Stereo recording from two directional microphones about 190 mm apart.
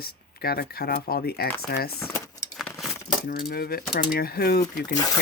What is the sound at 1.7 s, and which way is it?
Speech, 55° left (ahead or behind).